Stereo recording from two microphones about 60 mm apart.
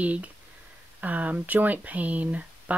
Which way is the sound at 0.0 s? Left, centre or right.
Right.